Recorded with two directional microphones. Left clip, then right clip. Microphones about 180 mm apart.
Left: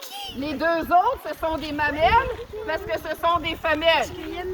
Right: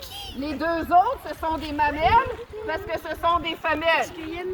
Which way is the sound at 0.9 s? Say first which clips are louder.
Right 3 dB; 30° left (ahead or behind).